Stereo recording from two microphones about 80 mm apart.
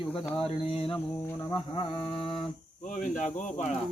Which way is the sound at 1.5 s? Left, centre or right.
Left.